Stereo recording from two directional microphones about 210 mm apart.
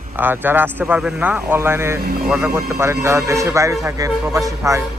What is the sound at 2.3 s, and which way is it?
Speech, 5° right (ahead or behind).